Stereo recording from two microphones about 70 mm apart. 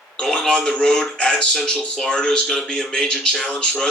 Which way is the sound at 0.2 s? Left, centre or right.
Centre.